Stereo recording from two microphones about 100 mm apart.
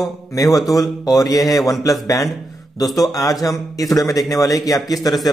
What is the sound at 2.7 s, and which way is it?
A man's voice, 40° left (ahead or behind).